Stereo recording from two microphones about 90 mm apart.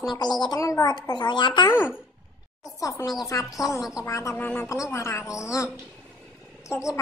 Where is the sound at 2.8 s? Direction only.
40° left (ahead or behind).